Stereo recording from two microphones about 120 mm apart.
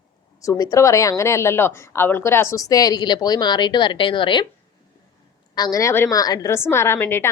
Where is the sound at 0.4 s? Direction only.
30° left (ahead or behind).